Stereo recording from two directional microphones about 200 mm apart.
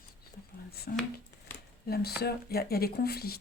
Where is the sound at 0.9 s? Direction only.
50° left (ahead or behind).